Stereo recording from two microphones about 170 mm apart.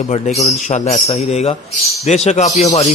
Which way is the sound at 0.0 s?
45° left (ahead or behind).